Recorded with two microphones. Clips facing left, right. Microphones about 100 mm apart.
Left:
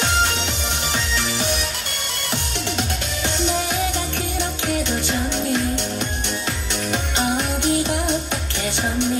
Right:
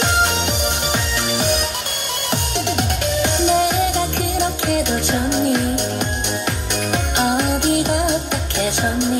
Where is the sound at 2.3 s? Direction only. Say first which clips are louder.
Right 5 dB; 15° right (ahead or behind).